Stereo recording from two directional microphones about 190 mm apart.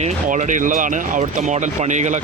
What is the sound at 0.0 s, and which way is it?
A man's voice, 40° right (ahead or behind).